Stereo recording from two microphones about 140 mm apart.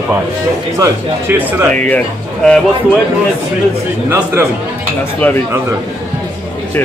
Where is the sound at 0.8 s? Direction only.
15° right (ahead or behind).